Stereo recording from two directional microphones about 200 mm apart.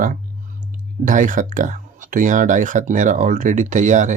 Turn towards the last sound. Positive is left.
turn(degrees=-35)  # may be behind; listen again after turning